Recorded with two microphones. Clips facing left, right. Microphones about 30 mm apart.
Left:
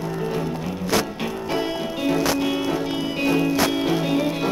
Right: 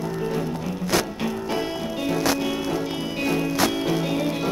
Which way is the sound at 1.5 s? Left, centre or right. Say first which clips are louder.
Left 2 dB; centre.